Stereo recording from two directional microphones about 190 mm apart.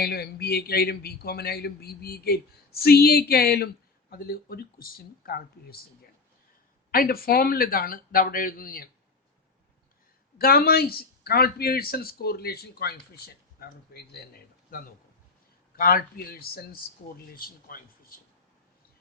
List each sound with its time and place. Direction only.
0.0 s a man's voice: 55° left (ahead or behind)
6.9 s speech: 50° left (ahead or behind)
10.3 s speech: 50° left (ahead or behind)